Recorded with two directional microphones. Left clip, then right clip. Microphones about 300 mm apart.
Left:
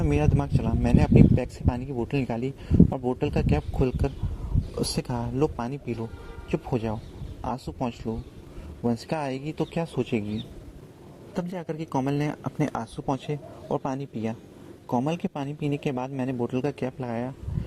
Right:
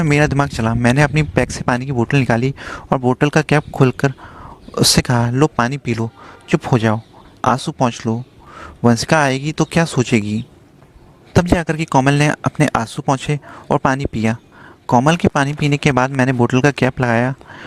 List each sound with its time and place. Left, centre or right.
0.0 s speech: right
11.3 s speech: right